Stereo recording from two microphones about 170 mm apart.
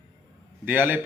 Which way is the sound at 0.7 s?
10° right (ahead or behind).